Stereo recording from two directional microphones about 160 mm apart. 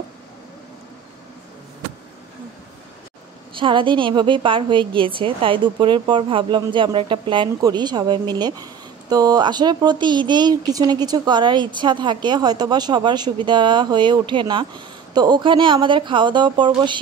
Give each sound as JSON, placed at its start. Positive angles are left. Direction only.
{"t": 3.5, "sound": "a woman's voice", "side_deg": -30}